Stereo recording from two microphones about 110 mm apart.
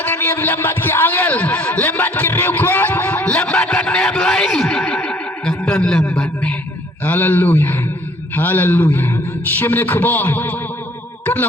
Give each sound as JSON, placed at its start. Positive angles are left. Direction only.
{"t": 0.0, "sound": "a man's voice", "side_deg": 20}
{"t": 7.0, "sound": "speech", "side_deg": 15}